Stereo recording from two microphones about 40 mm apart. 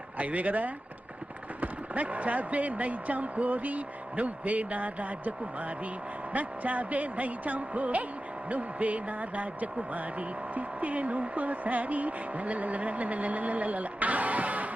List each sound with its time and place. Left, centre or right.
0.2 s speech: right
6.3 s speech: right